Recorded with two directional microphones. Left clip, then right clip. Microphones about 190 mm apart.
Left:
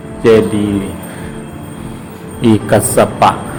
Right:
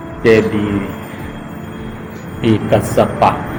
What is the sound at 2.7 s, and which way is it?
Speech, 50° left (ahead or behind).